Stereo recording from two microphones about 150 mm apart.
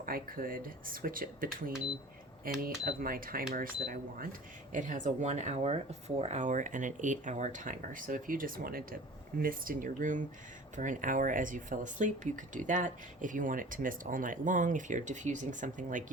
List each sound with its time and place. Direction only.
0.0 s speech: 70° right (ahead or behind)